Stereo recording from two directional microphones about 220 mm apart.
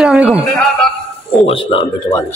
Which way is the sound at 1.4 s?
25° left (ahead or behind).